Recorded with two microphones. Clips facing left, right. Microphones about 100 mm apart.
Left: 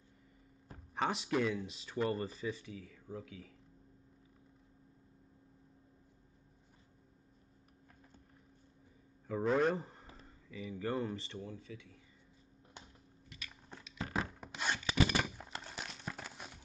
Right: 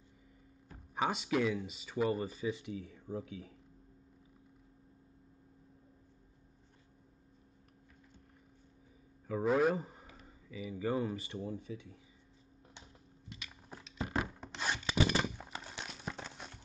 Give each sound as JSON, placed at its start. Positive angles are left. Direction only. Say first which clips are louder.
{"t": 0.9, "sound": "speech", "louder": "right 1 dB", "side_deg": 0}
{"t": 9.3, "sound": "a man's voice", "louder": "right 2 dB", "side_deg": -5}
{"t": 11.4, "sound": "speech", "louder": "right 6 dB", "side_deg": -30}
{"t": 13.3, "sound": "a sound", "louder": "right 2 dB", "side_deg": -25}
{"t": 13.9, "sound": "a sound", "louder": "right 2 dB", "side_deg": -10}
{"t": 14.4, "sound": "rub", "louder": "right 1 dB", "side_deg": 5}
{"t": 15.3, "sound": "clip-clop", "louder": "even", "side_deg": -5}